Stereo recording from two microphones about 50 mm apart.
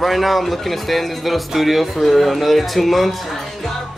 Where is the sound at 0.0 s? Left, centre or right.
Centre.